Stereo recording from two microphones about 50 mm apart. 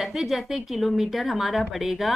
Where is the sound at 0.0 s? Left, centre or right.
Centre.